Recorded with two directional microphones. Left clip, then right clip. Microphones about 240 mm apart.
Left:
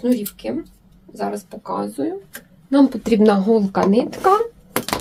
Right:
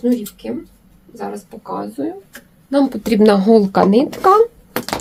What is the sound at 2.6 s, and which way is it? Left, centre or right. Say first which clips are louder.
Speech: even; centre.